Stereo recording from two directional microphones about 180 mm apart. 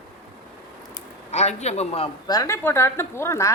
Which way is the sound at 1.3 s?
40° left (ahead or behind).